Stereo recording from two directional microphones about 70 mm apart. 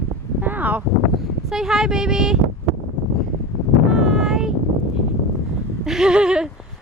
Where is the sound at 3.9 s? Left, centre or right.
Centre.